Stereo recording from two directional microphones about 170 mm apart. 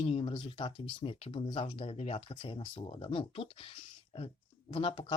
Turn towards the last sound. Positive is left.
turn(degrees=30)  # may be behind; listen again after turning